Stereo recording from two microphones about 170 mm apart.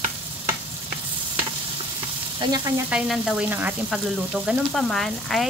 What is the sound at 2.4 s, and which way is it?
Speech, 25° right (ahead or behind).